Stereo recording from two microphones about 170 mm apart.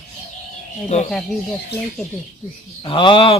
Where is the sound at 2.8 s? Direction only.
30° left (ahead or behind).